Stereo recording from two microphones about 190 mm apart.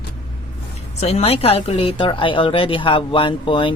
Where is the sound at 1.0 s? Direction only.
35° left (ahead or behind).